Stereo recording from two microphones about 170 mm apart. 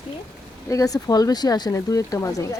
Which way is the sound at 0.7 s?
20° left (ahead or behind).